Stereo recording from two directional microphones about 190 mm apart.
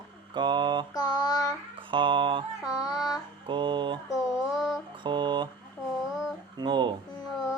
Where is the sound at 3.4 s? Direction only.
25° right (ahead or behind).